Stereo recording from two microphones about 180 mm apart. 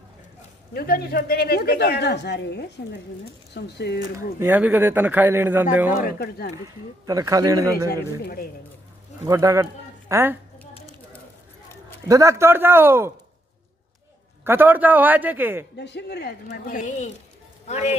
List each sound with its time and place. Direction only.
0.7 s speech: 55° left (ahead or behind)
4.4 s a man's voice: 10° right (ahead or behind)
6.0 s speech: 60° left (ahead or behind)
7.1 s a man's voice: 20° right (ahead or behind)
7.9 s speech: 55° left (ahead or behind)
9.2 s speech: 20° right (ahead or behind)
12.1 s a man's voice: 15° right (ahead or behind)
14.4 s a man's voice: 10° right (ahead or behind)
15.8 s speech: 70° left (ahead or behind); by 17.9 s 40° left (ahead or behind)